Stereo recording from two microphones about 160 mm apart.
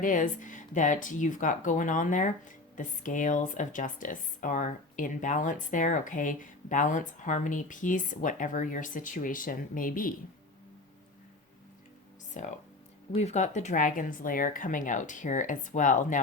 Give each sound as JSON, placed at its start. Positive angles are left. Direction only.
{"t": 0.0, "sound": "speech", "side_deg": 55}
{"t": 12.3, "sound": "speech", "side_deg": 50}